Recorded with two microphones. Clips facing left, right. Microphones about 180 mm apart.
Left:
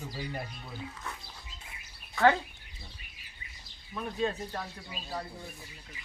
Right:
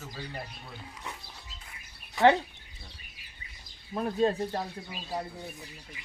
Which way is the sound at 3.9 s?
35° right (ahead or behind).